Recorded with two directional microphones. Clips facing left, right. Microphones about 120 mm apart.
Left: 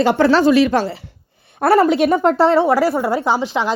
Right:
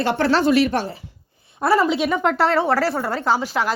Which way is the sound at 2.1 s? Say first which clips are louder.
Left 5 dB; 30° left (ahead or behind).